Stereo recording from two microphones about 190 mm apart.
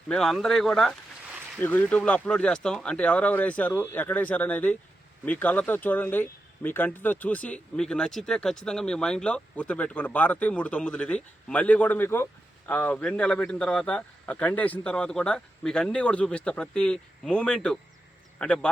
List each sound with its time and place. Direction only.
0.1 s speech: centre (ahead or behind)